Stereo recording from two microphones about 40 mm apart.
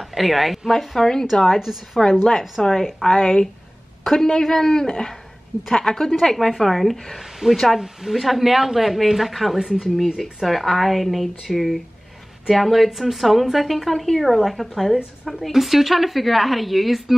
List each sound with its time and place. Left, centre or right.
0.0 s a woman's voice: centre
2.0 s a woman's voice: centre
3.0 s speech: centre
4.0 s a woman's voice: centre